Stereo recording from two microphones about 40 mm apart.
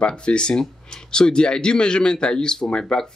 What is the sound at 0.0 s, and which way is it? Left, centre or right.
Speech, left.